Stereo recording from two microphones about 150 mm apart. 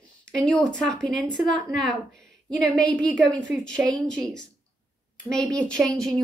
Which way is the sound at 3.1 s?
5° left (ahead or behind).